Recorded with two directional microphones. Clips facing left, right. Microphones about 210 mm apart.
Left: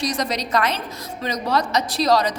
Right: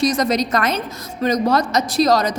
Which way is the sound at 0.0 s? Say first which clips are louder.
Right 7 dB; 45° right (ahead or behind).